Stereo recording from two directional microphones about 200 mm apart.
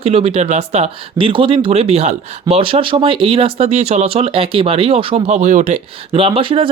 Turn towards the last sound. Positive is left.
turn(degrees=-25)  # may be behind; listen again after turning